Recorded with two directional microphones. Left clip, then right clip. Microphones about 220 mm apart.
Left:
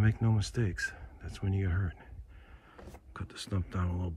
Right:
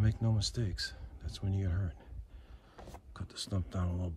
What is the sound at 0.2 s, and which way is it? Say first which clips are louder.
Speech: left 2 dB; 15° right (ahead or behind).